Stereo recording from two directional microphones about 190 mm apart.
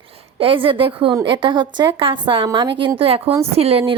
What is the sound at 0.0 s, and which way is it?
A woman's voice, 30° right (ahead or behind).